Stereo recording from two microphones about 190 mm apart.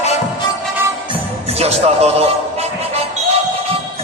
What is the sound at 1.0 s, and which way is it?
Music, 30° right (ahead or behind).